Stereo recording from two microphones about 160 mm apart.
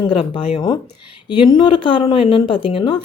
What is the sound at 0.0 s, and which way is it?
A woman's voice, 30° left (ahead or behind).